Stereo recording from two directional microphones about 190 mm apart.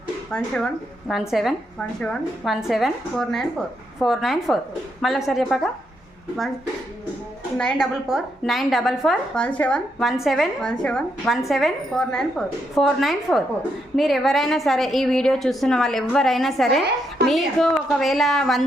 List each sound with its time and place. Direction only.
0.3 s a woman's voice: 5° left (ahead or behind)
7.6 s a woman's voice: 5° left (ahead or behind)